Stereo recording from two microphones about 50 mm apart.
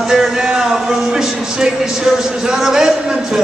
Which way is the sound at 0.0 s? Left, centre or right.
Centre.